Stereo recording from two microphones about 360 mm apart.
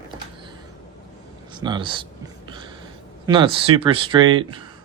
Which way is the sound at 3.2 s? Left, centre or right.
Centre.